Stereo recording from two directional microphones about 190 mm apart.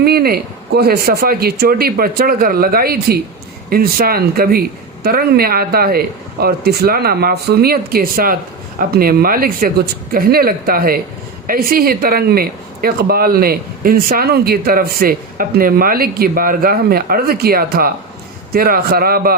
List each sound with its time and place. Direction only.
0.0 s speech: 55° right (ahead or behind)